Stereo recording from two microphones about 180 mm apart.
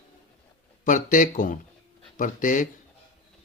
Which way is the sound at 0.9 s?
45° left (ahead or behind).